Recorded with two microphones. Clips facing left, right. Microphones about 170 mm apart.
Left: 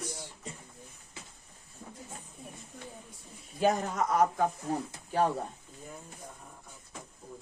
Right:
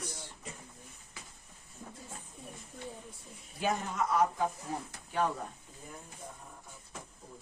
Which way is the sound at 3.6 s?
40° left (ahead or behind).